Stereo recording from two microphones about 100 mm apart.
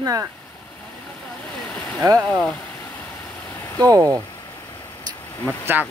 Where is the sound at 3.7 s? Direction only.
40° right (ahead or behind).